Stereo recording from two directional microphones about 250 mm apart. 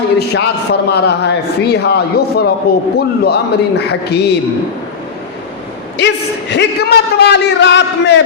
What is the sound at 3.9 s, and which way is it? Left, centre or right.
Speech, left.